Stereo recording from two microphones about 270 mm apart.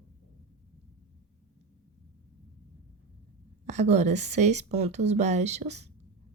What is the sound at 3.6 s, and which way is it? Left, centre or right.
Speech, right.